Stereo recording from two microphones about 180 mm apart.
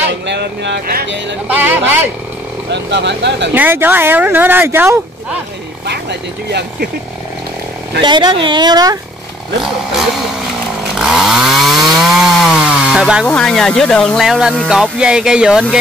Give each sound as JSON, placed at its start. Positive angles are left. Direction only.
{"t": 0.3, "sound": "speech", "side_deg": -70}
{"t": 1.5, "sound": "speech", "side_deg": -10}
{"t": 2.7, "sound": "speech", "side_deg": -75}
{"t": 3.5, "sound": "speech", "side_deg": -10}
{"t": 5.9, "sound": "speech", "side_deg": -65}
{"t": 8.0, "sound": "speech", "side_deg": -25}
{"t": 9.6, "sound": "speech", "side_deg": 0}
{"t": 11.0, "sound": "chainsaw", "side_deg": -5}